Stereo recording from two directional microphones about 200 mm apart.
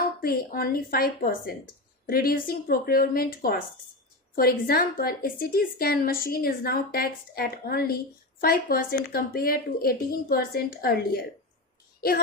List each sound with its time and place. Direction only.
0.2 s a woman's voice: 50° left (ahead or behind)